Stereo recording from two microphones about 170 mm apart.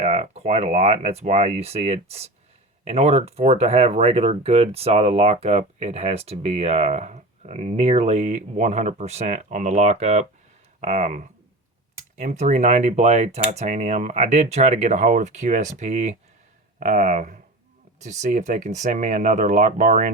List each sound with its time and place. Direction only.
0.0 s speech: 40° right (ahead or behind)